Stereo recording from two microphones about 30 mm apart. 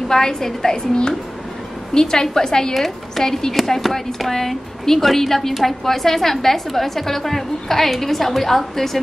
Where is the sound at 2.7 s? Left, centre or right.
Centre.